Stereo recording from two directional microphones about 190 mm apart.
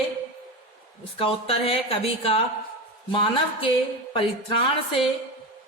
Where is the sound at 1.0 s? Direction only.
30° left (ahead or behind).